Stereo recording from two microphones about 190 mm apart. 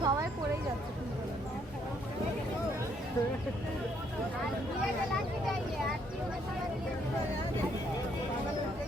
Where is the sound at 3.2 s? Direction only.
15° left (ahead or behind).